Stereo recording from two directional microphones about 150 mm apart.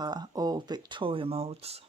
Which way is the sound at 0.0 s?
25° right (ahead or behind).